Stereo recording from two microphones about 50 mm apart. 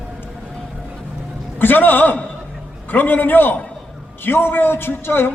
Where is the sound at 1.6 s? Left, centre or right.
Left.